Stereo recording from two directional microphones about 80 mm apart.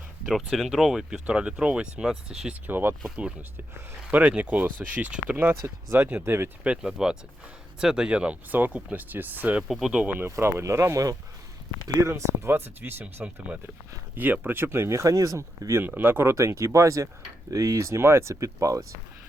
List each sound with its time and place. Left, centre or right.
0.3 s speech: centre
2.6 s speech: right
4.1 s speech: centre
5.5 s speech: right
6.7 s speech: centre
9.6 s speech: centre
10.1 s speech: right
10.3 s speech: right
14.4 s speech: right